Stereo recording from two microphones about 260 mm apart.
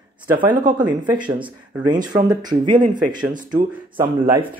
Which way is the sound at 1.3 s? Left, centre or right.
Centre.